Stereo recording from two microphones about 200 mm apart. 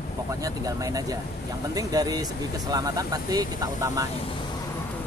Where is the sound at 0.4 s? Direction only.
15° right (ahead or behind).